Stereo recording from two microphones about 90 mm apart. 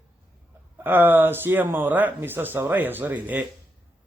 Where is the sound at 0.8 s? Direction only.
20° right (ahead or behind).